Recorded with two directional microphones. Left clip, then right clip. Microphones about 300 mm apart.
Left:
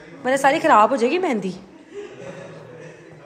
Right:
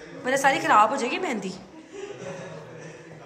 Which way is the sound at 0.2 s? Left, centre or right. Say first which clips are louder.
Left 5 dB; centre.